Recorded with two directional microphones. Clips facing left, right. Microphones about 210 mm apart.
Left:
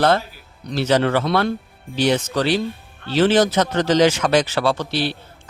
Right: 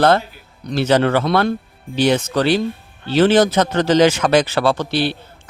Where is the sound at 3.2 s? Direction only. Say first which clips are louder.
Right 3 dB; 55° right (ahead or behind).